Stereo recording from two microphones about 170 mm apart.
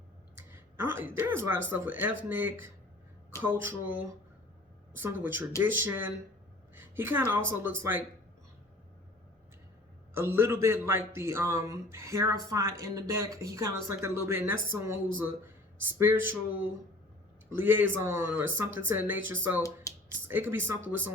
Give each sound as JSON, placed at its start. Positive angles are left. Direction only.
{"t": 0.3, "sound": "a woman's voice", "side_deg": -15}
{"t": 10.2, "sound": "a man's voice", "side_deg": -15}
{"t": 15.8, "sound": "a man's voice", "side_deg": -10}